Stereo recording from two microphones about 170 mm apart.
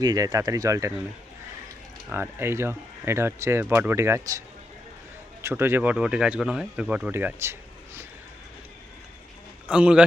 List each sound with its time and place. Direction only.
0.0 s speech: 20° right (ahead or behind)
2.0 s speech: 10° right (ahead or behind)
9.6 s speech: 5° right (ahead or behind)